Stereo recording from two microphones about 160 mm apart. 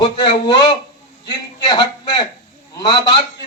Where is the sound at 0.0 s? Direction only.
30° left (ahead or behind).